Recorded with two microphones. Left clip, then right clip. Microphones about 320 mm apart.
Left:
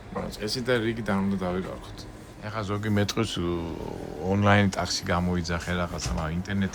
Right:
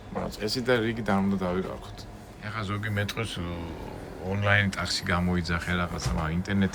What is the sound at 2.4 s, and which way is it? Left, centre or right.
Speech, centre.